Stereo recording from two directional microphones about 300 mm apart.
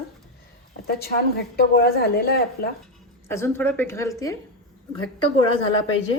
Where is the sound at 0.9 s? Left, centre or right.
Left.